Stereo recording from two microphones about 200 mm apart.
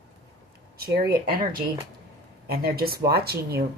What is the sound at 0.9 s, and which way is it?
A woman's voice, 50° right (ahead or behind).